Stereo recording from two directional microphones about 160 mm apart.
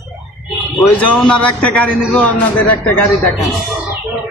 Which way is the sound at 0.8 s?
10° left (ahead or behind).